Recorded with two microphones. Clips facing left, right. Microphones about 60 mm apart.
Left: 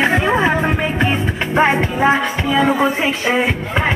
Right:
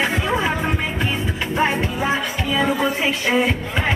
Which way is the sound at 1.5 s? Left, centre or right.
Left.